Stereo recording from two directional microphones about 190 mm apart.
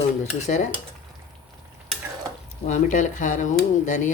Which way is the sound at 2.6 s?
40° left (ahead or behind).